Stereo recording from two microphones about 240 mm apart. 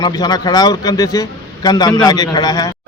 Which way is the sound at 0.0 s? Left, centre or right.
Centre.